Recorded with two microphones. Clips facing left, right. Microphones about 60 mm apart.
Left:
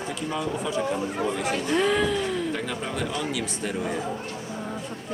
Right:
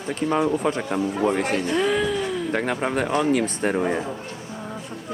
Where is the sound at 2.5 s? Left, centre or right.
Right.